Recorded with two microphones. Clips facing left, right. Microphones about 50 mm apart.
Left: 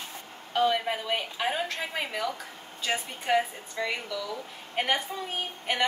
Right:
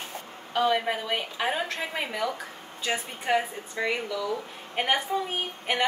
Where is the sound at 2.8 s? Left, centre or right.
Centre.